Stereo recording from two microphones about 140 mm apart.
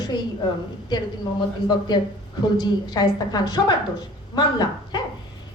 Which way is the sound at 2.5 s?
30° left (ahead or behind).